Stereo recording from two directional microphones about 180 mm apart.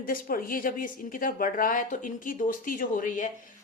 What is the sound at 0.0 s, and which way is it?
A woman's voice, 55° left (ahead or behind).